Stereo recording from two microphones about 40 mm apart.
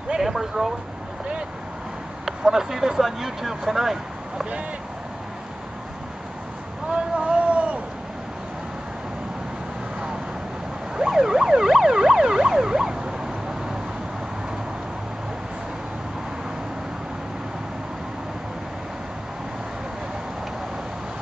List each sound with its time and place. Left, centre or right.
0.1 s speech: centre
2.2 s speech: centre
6.9 s boat: right
11.0 s emergency vehicle: centre